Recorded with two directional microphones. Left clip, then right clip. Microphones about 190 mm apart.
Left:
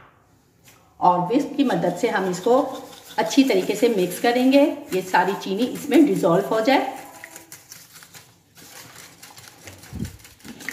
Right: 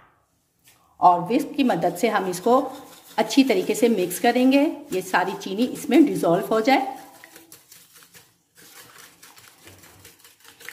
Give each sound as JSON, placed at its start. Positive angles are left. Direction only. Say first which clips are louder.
{"t": 1.0, "sound": "a woman's voice", "louder": "right 1 dB", "side_deg": -55}